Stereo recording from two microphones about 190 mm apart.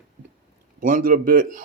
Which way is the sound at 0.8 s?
45° right (ahead or behind).